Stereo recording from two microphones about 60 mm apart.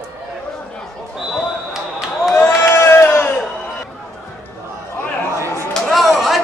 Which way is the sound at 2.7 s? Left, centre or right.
Left.